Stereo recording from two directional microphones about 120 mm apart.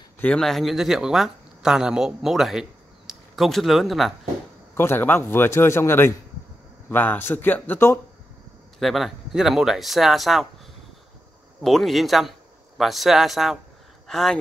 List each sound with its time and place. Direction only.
0.2 s speech: 5° left (ahead or behind)
4.7 s a man's voice: 20° left (ahead or behind)
8.7 s speech: centre (ahead or behind)
11.6 s a man's voice: centre (ahead or behind)